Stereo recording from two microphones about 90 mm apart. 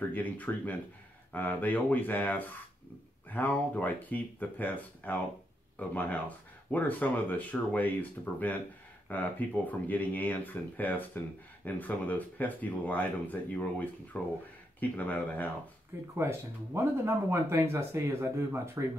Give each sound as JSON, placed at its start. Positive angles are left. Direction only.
{"t": 0.1, "sound": "speech", "side_deg": 20}
{"t": 16.2, "sound": "speech", "side_deg": -30}